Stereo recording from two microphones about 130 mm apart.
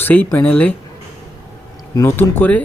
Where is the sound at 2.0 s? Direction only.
20° left (ahead or behind).